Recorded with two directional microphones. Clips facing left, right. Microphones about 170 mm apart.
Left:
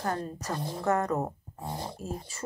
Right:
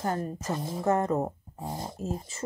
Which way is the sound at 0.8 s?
25° right (ahead or behind).